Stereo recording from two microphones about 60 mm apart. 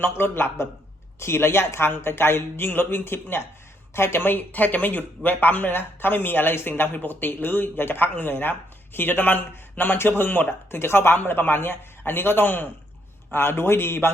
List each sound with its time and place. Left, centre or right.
0.0 s speech: left